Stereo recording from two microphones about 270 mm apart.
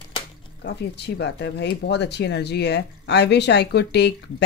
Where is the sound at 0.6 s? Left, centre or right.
Left.